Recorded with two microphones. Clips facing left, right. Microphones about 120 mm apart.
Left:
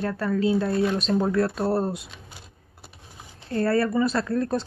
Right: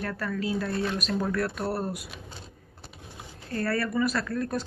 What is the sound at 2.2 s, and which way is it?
Vehicle, 10° left (ahead or behind).